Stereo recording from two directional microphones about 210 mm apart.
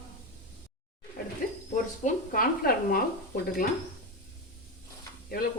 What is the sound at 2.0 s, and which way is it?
Speech, 45° left (ahead or behind).